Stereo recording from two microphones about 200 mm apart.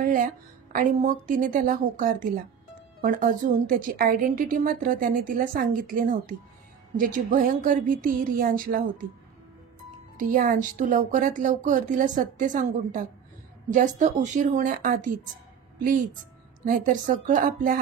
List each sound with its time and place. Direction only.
0.0 s music: 45° right (ahead or behind)
0.7 s a woman's voice: 40° right (ahead or behind)
10.1 s a woman's voice: 40° right (ahead or behind)
16.6 s a woman's voice: 40° right (ahead or behind)